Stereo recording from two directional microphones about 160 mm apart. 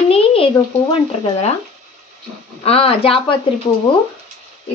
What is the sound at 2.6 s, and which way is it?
Speech, 40° left (ahead or behind).